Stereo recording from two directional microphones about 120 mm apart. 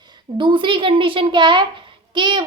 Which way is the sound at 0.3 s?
45° right (ahead or behind).